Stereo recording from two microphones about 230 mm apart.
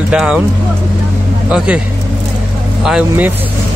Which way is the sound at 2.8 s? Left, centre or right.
Centre.